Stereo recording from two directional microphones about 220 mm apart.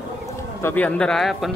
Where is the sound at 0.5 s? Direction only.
10° left (ahead or behind).